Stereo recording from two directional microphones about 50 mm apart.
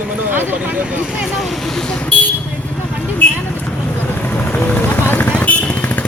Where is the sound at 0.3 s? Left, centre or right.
Right.